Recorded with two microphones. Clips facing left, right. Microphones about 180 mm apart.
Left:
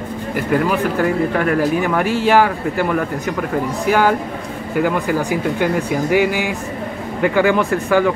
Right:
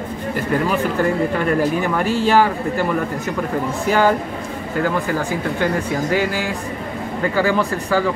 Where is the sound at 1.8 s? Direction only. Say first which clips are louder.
Left 1 dB; 15° left (ahead or behind).